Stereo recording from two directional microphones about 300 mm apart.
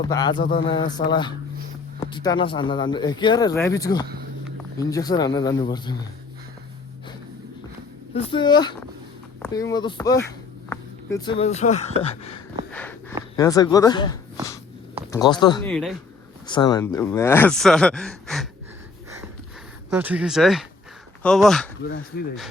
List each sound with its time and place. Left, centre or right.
0.0 s speech: centre
8.1 s speech: centre
12.7 s a sound: centre
13.3 s speech: centre
15.7 s speech: centre
16.5 s speech: centre
19.9 s speech: centre
21.8 s speech: left